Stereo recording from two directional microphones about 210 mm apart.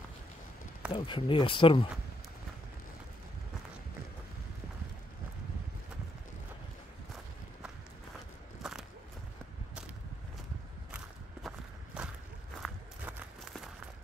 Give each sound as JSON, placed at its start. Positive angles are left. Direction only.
{"t": 0.9, "sound": "speech", "side_deg": 25}
{"t": 8.6, "sound": "a sound", "side_deg": 0}
{"t": 11.4, "sound": "walk", "side_deg": -5}